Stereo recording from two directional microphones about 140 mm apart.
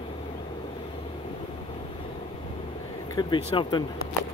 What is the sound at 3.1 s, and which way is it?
Speech, 35° left (ahead or behind).